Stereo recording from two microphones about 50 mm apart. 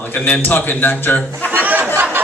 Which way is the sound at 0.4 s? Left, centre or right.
Left.